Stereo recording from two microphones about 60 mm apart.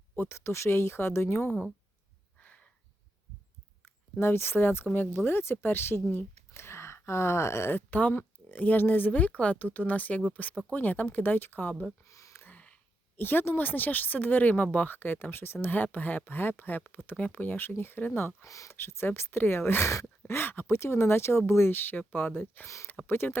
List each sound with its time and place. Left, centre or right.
0.2 s speech: left
2.4 s a sound: left
3.8 s speech: left
7.7 s speech: left
12.0 s a sound: left
12.3 s a sound: left
13.1 s speech: left
18.4 s speech: left
18.7 s speech: left